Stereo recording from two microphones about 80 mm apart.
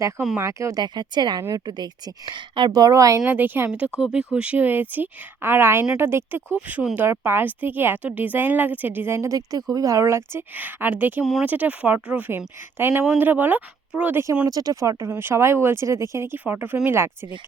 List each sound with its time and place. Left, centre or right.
0.3 s speech: right
0.8 s speech: right
2.7 s speech: right
3.2 s speech: right
3.7 s speech: centre; by 9.3 s right
9.3 s speech: right
10.5 s speech: right
11.2 s speech: centre
11.4 s speech: centre
12.7 s speech: right
14.4 s speech: right